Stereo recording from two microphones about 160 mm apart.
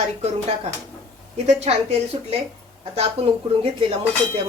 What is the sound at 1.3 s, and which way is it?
A woman's voice, 45° right (ahead or behind).